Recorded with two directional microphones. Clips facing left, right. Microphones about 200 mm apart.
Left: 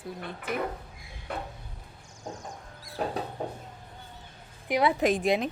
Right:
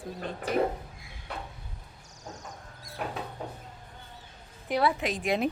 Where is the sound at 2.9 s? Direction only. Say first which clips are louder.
Left 4 dB; 35° left (ahead or behind).